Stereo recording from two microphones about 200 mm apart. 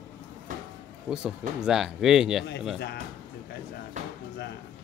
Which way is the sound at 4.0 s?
35° right (ahead or behind).